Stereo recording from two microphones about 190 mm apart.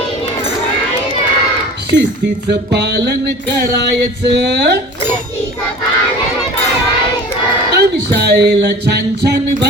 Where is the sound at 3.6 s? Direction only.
60° right (ahead or behind).